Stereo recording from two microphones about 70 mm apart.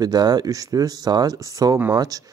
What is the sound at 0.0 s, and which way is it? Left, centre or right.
Speech, right.